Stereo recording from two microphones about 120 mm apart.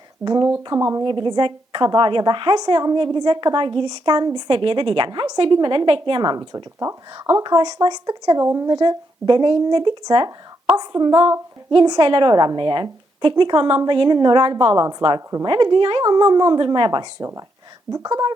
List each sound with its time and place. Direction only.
0.3 s a woman's voice: 35° right (ahead or behind)
1.0 s a woman's voice: 40° right (ahead or behind)